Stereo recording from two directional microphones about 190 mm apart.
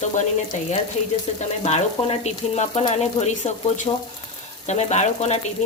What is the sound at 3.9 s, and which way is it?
Speech, 25° left (ahead or behind).